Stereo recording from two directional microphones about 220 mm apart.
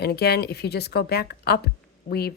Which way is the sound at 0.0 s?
45° left (ahead or behind).